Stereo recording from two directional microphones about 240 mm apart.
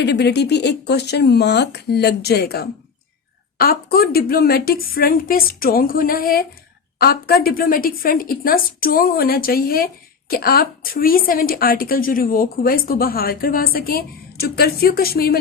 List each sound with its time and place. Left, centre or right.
0.0 s a woman's voice: left